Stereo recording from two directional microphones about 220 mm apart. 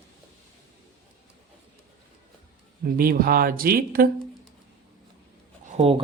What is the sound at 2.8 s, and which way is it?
Speech, 40° right (ahead or behind).